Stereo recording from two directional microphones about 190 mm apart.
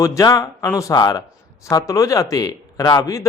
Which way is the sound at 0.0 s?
20° left (ahead or behind).